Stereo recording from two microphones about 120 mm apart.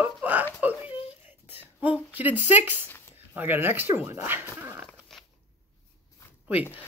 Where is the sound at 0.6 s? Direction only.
15° right (ahead or behind).